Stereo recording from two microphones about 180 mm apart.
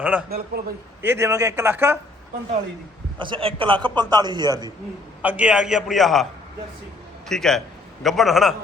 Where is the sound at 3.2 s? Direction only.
30° right (ahead or behind).